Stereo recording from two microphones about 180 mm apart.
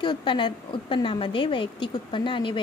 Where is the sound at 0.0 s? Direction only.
25° left (ahead or behind).